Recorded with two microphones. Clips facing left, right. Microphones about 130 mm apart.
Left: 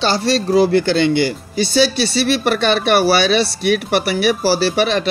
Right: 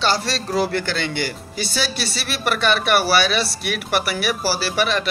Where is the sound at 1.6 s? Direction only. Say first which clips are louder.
Left 10 dB; 25° left (ahead or behind).